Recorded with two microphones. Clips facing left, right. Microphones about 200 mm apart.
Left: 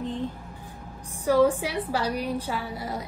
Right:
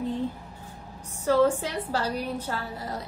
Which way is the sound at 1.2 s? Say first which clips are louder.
Left 1 dB; 15° left (ahead or behind).